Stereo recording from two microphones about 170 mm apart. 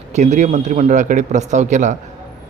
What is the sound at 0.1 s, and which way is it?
A man's voice, 45° right (ahead or behind).